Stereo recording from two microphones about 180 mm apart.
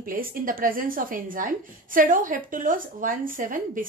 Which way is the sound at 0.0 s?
50° right (ahead or behind).